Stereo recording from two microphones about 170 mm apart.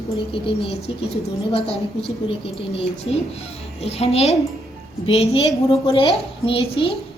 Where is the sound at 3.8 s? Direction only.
35° left (ahead or behind).